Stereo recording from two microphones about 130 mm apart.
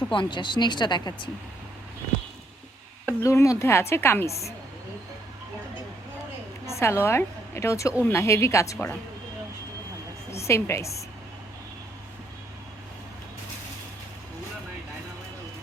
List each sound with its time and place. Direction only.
0.1 s speech: 40° left (ahead or behind)
3.2 s a woman's voice: 25° left (ahead or behind)
6.7 s a woman's voice: 20° left (ahead or behind)
10.3 s a woman's voice: 20° left (ahead or behind)